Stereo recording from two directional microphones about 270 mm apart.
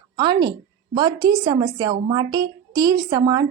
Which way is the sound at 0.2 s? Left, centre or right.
Centre.